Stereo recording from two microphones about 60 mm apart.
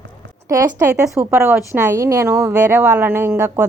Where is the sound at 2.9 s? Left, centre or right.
Right.